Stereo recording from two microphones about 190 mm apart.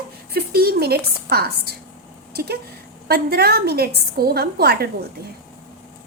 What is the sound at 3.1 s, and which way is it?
A woman's voice, 55° right (ahead or behind).